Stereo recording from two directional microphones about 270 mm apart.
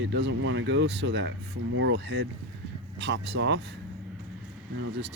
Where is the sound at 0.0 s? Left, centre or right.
Right.